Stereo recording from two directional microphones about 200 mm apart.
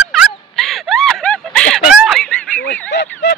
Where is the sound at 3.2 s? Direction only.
60° left (ahead or behind).